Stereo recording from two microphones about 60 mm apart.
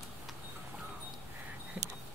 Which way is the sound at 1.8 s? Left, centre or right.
Right.